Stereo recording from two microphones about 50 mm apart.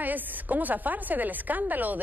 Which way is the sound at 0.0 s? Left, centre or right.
Right.